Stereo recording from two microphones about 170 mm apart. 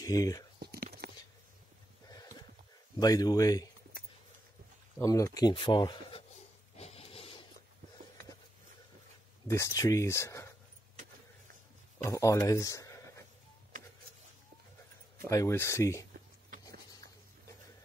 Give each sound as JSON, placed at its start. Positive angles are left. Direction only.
{"t": 0.0, "sound": "speech", "side_deg": 20}
{"t": 0.6, "sound": "a sound", "side_deg": -70}
{"t": 2.0, "sound": "horse", "side_deg": 20}
{"t": 3.0, "sound": "speech", "side_deg": 20}
{"t": 4.9, "sound": "speech", "side_deg": 20}
{"t": 6.8, "sound": "printer", "side_deg": 35}
{"t": 9.5, "sound": "speech", "side_deg": 20}
{"t": 12.0, "sound": "speech", "side_deg": 20}
{"t": 15.2, "sound": "speech", "side_deg": 20}
{"t": 16.4, "sound": "a sound", "side_deg": -55}